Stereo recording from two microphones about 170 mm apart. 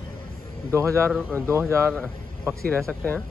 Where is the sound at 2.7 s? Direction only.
10° left (ahead or behind).